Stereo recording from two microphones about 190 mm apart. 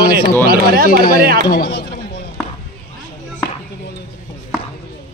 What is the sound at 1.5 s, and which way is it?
Speech, 55° left (ahead or behind).